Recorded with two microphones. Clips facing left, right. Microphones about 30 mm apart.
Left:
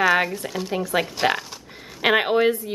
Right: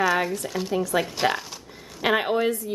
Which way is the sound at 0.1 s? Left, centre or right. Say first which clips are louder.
Left 3 dB; centre.